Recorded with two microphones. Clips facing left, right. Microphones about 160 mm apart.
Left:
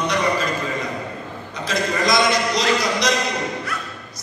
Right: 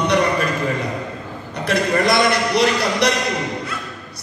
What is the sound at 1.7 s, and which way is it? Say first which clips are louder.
A man's voice: right 3 dB; 60° right (ahead or behind).